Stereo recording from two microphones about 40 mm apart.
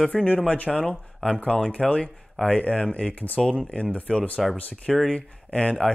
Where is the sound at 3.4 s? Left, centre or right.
Centre.